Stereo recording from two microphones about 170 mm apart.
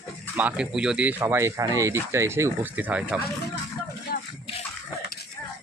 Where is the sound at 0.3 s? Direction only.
5° right (ahead or behind).